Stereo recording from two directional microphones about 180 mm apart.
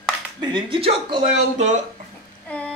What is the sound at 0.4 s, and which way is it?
Speech, 25° right (ahead or behind).